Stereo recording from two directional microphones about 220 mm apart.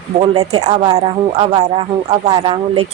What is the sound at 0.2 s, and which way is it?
A woman's voice, 20° right (ahead or behind).